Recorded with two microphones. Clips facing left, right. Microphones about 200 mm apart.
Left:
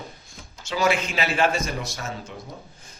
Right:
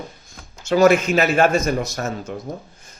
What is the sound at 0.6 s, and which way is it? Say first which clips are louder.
Speech: right 9 dB; 45° right (ahead or behind).